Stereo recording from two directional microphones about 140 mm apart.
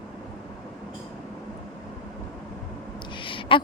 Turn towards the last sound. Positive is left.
turn(degrees=40)  # may be behind; listen again after turning